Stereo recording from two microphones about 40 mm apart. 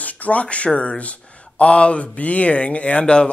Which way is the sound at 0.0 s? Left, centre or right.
Left.